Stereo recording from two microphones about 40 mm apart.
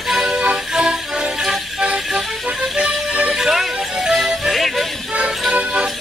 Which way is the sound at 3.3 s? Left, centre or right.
Centre.